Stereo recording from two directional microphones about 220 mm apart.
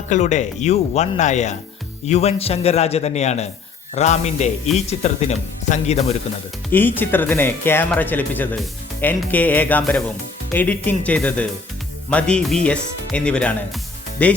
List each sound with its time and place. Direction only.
0.1 s a man's voice: 35° left (ahead or behind)
6.7 s speech: 10° left (ahead or behind)